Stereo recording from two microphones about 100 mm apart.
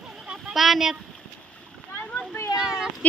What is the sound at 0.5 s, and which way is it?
Speech, centre (ahead or behind).